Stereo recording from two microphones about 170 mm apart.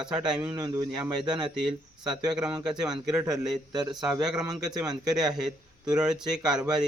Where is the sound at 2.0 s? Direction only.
5° right (ahead or behind).